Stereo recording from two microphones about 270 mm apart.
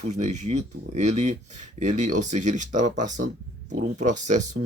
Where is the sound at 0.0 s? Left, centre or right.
Right.